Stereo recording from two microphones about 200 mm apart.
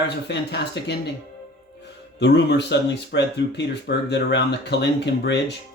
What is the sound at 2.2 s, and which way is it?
Speech, 60° left (ahead or behind).